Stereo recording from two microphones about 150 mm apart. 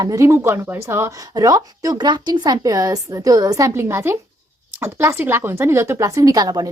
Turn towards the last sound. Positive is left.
turn(degrees=-25)  # may be behind; listen again after turning